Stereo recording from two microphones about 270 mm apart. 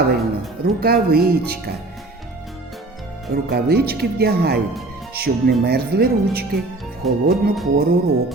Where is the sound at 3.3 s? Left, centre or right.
Right.